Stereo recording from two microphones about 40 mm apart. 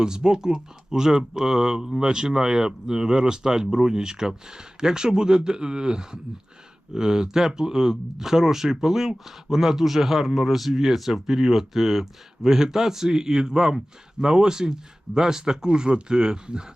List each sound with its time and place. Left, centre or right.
0.0 s speech: centre